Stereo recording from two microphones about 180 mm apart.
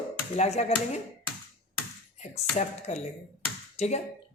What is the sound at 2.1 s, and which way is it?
Speech, 40° left (ahead or behind).